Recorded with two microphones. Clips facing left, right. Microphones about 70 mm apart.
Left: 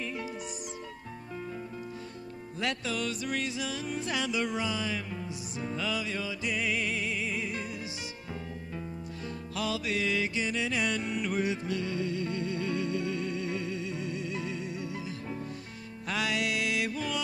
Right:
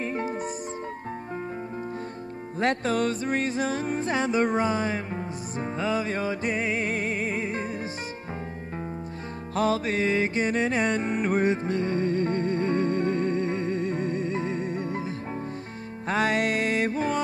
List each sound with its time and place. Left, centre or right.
0.0 s music: right
2.6 s music: right
9.6 s music: right